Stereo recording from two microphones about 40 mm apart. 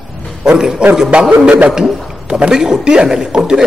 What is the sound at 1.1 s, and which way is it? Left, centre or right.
A man's voice, right.